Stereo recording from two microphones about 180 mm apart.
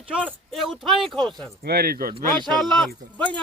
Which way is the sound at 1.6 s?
60° right (ahead or behind).